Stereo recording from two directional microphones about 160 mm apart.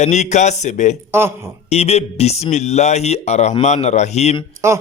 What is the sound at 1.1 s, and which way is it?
Speech, 15° right (ahead or behind).